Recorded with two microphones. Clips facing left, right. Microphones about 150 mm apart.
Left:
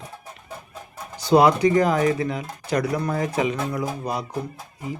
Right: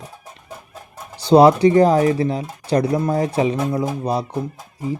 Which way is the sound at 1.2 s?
30° right (ahead or behind).